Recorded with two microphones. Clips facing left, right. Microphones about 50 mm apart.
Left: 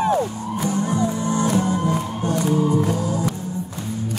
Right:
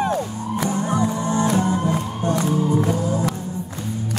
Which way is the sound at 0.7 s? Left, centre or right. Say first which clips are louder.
Left 1 dB; right.